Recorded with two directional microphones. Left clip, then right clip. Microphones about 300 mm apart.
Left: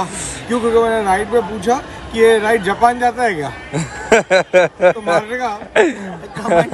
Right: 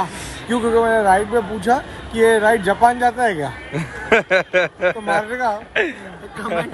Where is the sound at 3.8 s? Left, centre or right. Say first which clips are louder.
Left 3 dB; centre.